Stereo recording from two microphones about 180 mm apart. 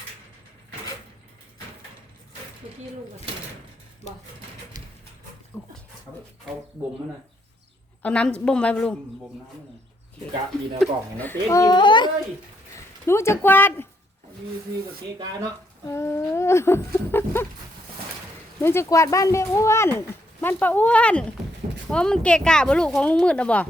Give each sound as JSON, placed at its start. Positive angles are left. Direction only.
{"t": 2.6, "sound": "speech", "side_deg": -30}
{"t": 5.5, "sound": "speech", "side_deg": 15}
{"t": 8.0, "sound": "speech", "side_deg": 5}
{"t": 10.8, "sound": "speech", "side_deg": 0}
{"t": 11.2, "sound": "a child's voice", "side_deg": 15}
{"t": 12.7, "sound": "speech", "side_deg": 15}
{"t": 15.9, "sound": "speech", "side_deg": 15}
{"t": 18.6, "sound": "speech", "side_deg": 15}